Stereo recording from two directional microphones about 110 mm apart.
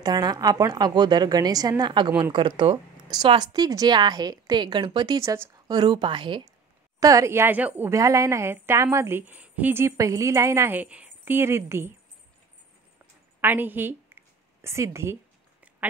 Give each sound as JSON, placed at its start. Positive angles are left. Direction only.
{"t": 0.0, "sound": "a woman's voice", "side_deg": -35}
{"t": 7.0, "sound": "a woman's voice", "side_deg": -30}
{"t": 7.9, "sound": "a woman's voice", "side_deg": -30}
{"t": 13.4, "sound": "a sound", "side_deg": -15}